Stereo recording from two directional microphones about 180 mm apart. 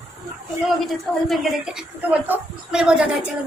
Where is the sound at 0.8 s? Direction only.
Centre (ahead or behind).